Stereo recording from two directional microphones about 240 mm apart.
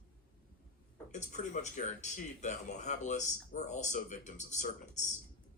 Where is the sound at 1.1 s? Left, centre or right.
Left.